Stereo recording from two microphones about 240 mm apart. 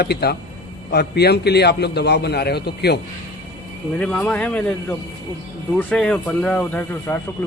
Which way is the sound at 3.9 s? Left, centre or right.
Centre.